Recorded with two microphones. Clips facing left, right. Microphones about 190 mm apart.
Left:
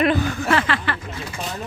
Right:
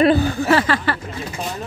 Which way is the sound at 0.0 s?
30° right (ahead or behind).